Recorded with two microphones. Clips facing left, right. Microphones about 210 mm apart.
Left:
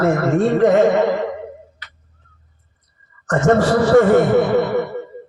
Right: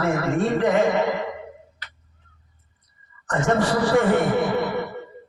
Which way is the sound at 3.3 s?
45° left (ahead or behind).